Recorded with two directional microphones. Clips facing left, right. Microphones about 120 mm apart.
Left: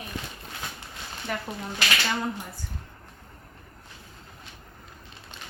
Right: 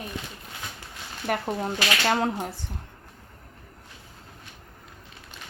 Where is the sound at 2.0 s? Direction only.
60° right (ahead or behind).